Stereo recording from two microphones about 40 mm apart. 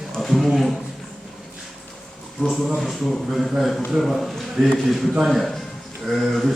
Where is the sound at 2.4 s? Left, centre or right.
Left.